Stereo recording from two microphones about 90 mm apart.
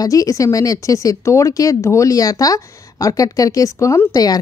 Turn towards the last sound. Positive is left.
turn(degrees=45)  # may be behind; listen again after turning